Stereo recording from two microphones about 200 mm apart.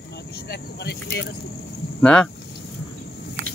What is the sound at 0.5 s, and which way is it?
Vehicle, 55° left (ahead or behind).